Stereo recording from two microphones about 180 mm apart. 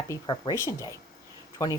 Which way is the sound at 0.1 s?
20° left (ahead or behind).